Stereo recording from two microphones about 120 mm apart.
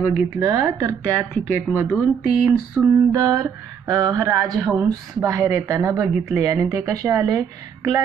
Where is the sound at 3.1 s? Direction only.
30° right (ahead or behind).